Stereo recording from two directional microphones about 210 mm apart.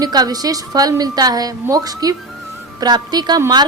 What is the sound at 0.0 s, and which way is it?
A woman's voice, 20° right (ahead or behind).